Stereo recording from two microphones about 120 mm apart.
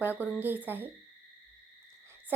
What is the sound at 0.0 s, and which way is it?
Speech, 15° right (ahead or behind).